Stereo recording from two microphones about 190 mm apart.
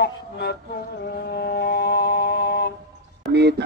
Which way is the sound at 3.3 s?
60° right (ahead or behind).